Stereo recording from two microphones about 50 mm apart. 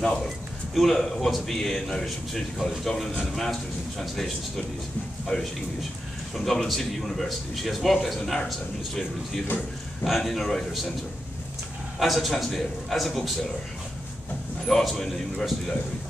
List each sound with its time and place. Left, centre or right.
0.7 s a man's voice: centre
5.3 s speech: centre
6.3 s a man's voice: centre
12.0 s a man's voice: centre
14.7 s a man's voice: centre